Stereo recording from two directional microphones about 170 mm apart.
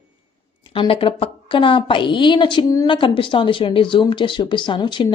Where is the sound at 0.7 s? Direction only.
30° left (ahead or behind).